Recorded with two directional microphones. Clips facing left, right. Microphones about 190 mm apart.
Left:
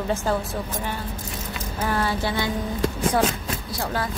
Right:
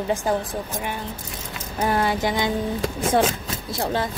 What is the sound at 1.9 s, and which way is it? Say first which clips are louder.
Speech: right 3 dB; 15° right (ahead or behind).